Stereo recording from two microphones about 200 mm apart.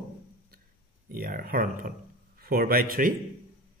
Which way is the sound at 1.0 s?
45° right (ahead or behind).